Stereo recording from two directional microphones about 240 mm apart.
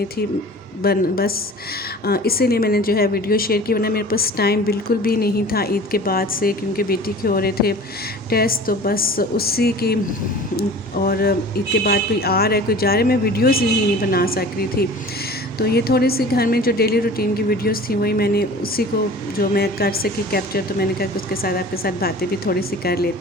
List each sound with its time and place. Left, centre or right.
0.8 s a woman's voice: left